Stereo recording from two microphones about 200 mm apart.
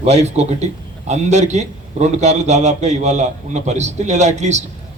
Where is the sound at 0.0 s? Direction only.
35° right (ahead or behind).